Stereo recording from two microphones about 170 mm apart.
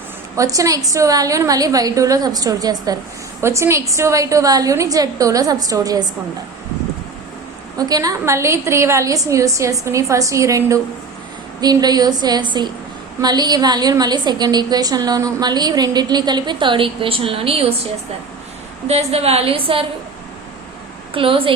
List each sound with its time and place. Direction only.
0.3 s a woman's voice: 20° right (ahead or behind)
7.8 s a woman's voice: 20° right (ahead or behind)
18.9 s a woman's voice: 35° right (ahead or behind)
21.1 s a woman's voice: 30° right (ahead or behind)